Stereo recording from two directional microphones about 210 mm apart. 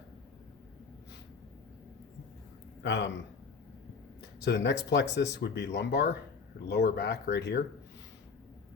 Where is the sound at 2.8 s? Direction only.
60° left (ahead or behind).